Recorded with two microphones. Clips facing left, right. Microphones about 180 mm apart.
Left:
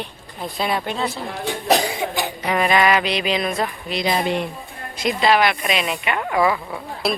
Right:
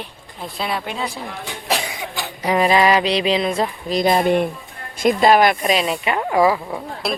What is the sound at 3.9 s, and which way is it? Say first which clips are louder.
Speech: right 6 dB; 50° right (ahead or behind).